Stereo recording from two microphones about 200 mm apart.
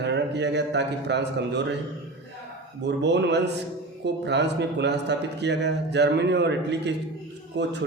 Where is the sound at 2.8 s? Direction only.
60° right (ahead or behind).